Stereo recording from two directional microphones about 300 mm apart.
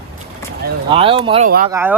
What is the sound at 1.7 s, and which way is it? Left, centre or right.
Speech, centre.